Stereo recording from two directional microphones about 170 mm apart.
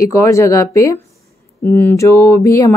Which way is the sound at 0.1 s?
15° left (ahead or behind).